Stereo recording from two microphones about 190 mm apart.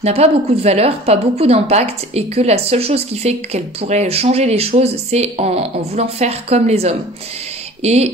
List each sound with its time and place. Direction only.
0.0 s a woman's voice: 35° right (ahead or behind)